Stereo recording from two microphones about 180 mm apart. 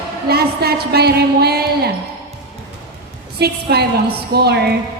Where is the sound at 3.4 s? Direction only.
60° right (ahead or behind).